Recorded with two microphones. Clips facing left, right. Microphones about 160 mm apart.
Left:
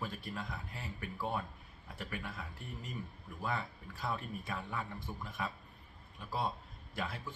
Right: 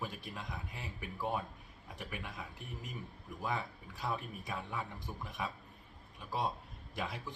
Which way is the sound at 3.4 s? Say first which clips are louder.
Even; 15° right (ahead or behind).